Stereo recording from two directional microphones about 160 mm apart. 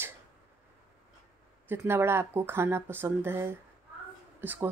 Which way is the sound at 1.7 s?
15° right (ahead or behind).